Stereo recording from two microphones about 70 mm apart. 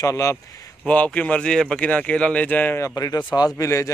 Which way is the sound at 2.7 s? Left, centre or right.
Left.